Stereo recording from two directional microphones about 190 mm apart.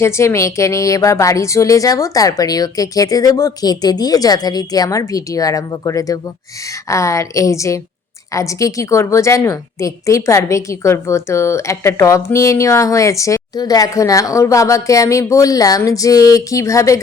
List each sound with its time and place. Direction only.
0.0 s a woman's voice: 15° left (ahead or behind)